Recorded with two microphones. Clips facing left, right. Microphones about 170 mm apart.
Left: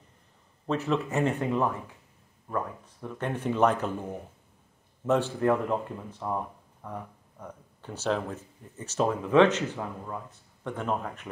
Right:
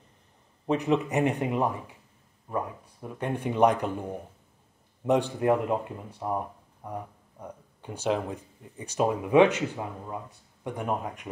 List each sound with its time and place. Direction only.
0.7 s speech: 15° right (ahead or behind)